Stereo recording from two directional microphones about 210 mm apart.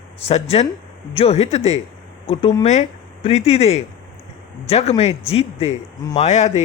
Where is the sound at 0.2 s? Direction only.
30° left (ahead or behind).